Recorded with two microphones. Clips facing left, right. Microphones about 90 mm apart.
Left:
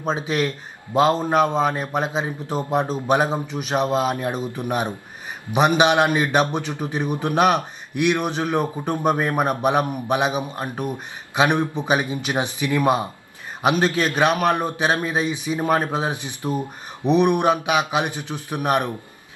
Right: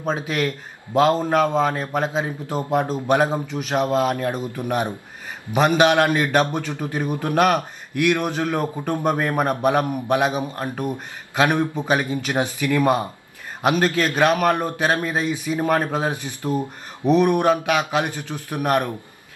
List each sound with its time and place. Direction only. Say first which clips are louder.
0.1 s speech: left 1 dB; 20° left (ahead or behind)
11.3 s a man's voice: even; 20° left (ahead or behind)